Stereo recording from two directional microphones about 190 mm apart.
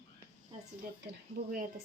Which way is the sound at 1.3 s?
55° right (ahead or behind).